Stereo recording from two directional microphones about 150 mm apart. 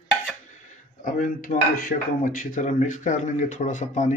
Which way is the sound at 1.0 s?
60° left (ahead or behind).